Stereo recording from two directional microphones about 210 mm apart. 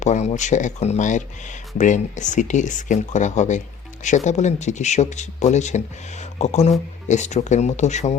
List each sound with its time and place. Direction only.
0.0 s speech: 35° left (ahead or behind)